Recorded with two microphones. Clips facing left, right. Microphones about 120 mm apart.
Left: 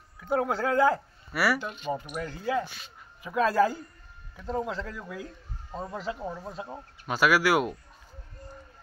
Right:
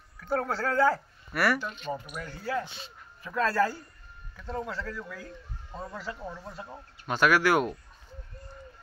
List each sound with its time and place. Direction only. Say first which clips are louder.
0.2 s speech: left 2 dB; 15° left (ahead or behind)
1.3 s speech: even; 5° left (ahead or behind)
2.6 s speech: left 1 dB; 25° right (ahead or behind)
3.2 s speech: left 3 dB; 15° left (ahead or behind)
7.1 s speech: even; 10° left (ahead or behind)